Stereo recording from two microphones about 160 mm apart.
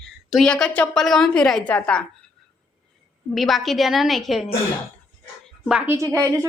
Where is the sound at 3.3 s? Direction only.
Centre (ahead or behind).